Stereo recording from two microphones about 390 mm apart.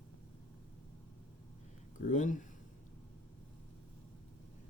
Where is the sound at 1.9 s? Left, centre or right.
Centre.